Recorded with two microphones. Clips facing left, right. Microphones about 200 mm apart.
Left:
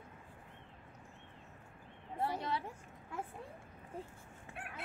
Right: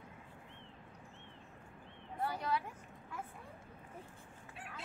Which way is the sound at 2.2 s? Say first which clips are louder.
Even; 25° left (ahead or behind).